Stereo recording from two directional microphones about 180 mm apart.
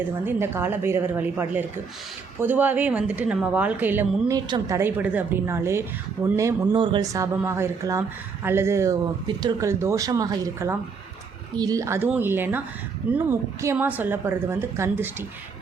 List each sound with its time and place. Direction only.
0.3 s speech: 10° right (ahead or behind)
4.4 s speech: 25° right (ahead or behind)